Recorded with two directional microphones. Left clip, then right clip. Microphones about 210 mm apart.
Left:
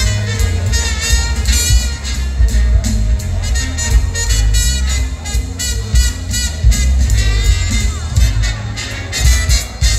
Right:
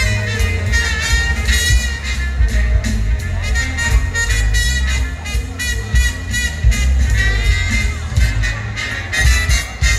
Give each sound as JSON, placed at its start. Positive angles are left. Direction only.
{"t": 0.0, "sound": "music", "side_deg": 55}